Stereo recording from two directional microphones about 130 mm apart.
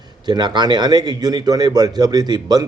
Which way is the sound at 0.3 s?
35° right (ahead or behind).